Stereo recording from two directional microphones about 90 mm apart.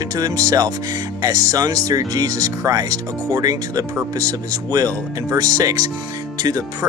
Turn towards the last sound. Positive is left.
turn(degrees=-40)  # may be behind; listen again after turning